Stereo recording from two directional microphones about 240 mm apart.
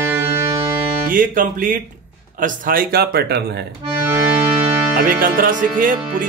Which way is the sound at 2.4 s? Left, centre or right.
Right.